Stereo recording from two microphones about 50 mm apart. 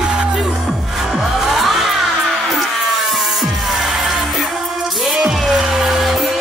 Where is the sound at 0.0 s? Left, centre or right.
Centre.